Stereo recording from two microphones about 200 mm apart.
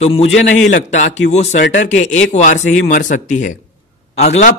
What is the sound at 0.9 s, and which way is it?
Speech, 35° left (ahead or behind).